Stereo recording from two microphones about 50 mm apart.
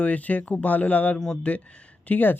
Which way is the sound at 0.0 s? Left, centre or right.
Left.